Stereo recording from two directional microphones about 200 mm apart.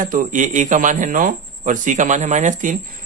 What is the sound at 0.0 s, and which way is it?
A man's voice, 40° right (ahead or behind).